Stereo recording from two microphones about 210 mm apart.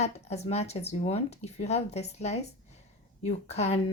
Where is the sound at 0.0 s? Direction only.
30° left (ahead or behind).